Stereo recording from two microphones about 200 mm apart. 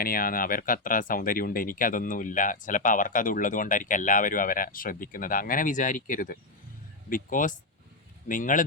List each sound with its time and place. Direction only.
0.0 s speech: 45° left (ahead or behind)